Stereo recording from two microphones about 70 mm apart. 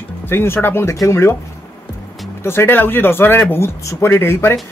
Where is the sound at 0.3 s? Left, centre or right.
Left.